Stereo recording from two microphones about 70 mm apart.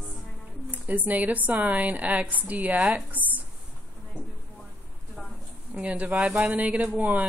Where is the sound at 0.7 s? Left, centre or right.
Right.